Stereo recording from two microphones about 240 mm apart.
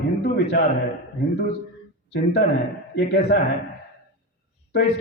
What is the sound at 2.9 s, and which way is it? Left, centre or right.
Speech, left.